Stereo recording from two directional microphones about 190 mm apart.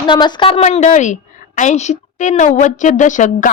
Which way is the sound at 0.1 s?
25° left (ahead or behind).